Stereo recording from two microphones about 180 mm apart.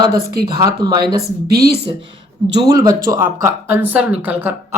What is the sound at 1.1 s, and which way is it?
Speech, 60° right (ahead or behind).